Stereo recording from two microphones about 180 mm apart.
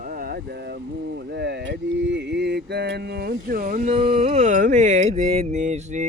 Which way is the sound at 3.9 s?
35° right (ahead or behind).